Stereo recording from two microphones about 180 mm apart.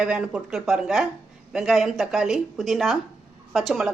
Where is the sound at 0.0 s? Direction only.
5° right (ahead or behind).